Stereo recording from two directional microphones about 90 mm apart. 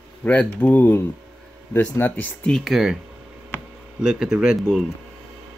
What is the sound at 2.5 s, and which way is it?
Speech, centre (ahead or behind).